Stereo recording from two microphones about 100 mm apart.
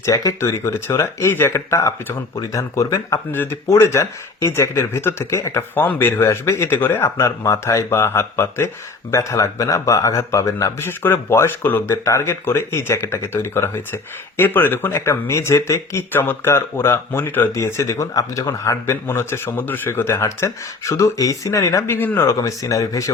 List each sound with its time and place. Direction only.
0.0 s speech: 35° left (ahead or behind); by 22.3 s 20° left (ahead or behind)
22.3 s speech: 35° left (ahead or behind)